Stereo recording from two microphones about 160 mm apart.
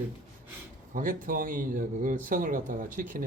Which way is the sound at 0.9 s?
60° right (ahead or behind).